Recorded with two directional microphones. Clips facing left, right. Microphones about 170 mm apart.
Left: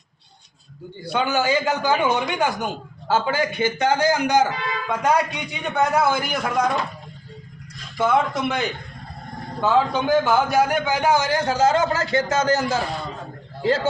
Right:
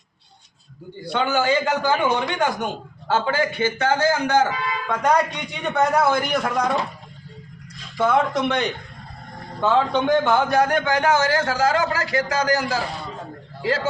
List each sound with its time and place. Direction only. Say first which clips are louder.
1.1 s a man's voice: right 1 dB; 5° left (ahead or behind)
7.9 s a man's voice: right 1 dB; centre (ahead or behind); by 13.8 s 25° left (ahead or behind)